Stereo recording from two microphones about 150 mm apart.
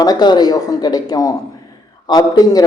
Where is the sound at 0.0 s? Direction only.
25° left (ahead or behind).